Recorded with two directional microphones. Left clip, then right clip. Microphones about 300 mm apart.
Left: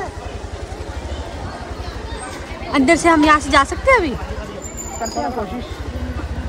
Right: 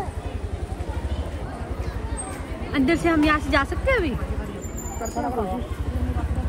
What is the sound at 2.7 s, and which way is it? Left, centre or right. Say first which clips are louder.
Speech: left 8 dB; centre.